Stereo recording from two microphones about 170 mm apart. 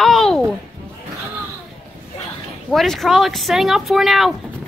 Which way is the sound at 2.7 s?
Centre (ahead or behind).